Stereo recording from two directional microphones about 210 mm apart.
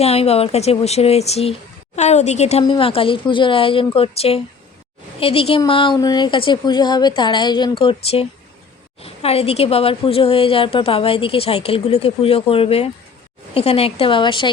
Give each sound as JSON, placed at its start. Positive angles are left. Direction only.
{"t": 0.0, "sound": "a woman's voice", "side_deg": 30}